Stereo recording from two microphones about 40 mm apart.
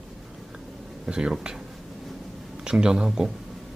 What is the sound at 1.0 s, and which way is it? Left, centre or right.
Speech, centre.